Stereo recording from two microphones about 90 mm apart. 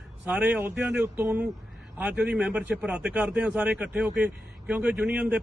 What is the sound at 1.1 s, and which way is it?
A man's voice, 25° right (ahead or behind).